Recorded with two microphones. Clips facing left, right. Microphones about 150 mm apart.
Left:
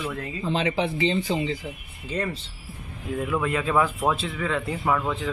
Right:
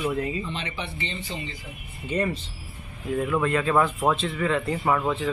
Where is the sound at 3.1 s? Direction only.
Centre (ahead or behind).